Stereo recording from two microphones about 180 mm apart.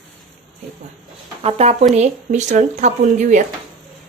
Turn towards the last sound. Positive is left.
turn(degrees=-45)  # may be behind; listen again after turning